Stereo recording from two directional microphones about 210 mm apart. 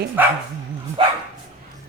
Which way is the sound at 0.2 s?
10° right (ahead or behind).